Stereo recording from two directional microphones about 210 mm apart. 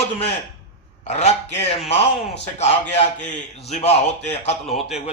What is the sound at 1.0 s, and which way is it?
Speech, 30° left (ahead or behind).